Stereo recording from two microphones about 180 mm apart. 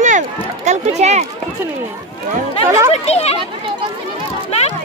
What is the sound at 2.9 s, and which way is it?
Speech, 35° left (ahead or behind).